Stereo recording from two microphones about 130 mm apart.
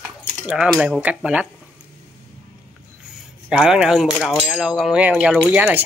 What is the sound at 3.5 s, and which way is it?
Speech, 5° right (ahead or behind).